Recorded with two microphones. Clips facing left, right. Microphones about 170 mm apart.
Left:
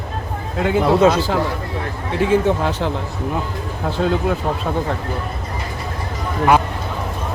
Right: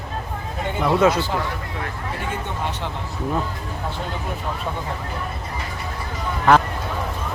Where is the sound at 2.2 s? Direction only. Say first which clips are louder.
Left 14 dB; 90° left.